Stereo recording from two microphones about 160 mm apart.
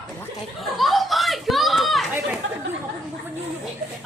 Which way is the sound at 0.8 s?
Centre (ahead or behind).